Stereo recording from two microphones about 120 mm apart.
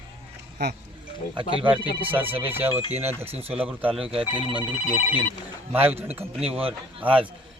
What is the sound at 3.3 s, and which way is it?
Speech, 55° right (ahead or behind).